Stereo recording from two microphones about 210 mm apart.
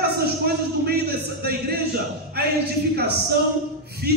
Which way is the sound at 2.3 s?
50° right (ahead or behind).